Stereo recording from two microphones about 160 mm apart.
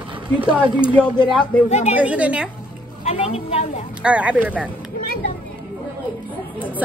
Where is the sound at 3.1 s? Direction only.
40° left (ahead or behind).